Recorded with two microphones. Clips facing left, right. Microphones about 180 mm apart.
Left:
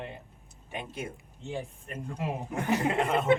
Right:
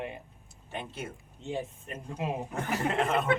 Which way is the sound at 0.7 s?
15° left (ahead or behind).